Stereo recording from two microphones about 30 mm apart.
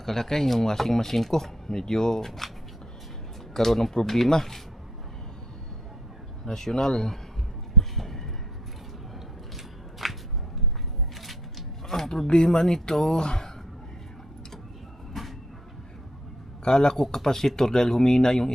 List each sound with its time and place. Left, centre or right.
0.0 s speech: centre
3.5 s speech: centre
6.4 s speech: centre
7.8 s a sound: centre
10.0 s a sound: centre
11.9 s a sound: centre
12.5 s speech: centre
15.2 s train: centre
16.6 s speech: left